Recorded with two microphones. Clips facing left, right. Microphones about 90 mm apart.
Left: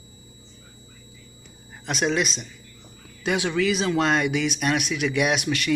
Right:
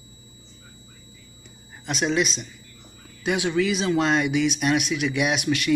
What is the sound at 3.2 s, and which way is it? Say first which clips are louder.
Speech: even; 45° left (ahead or behind).